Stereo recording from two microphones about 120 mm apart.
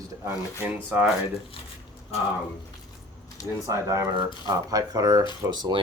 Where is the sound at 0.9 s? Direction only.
15° right (ahead or behind).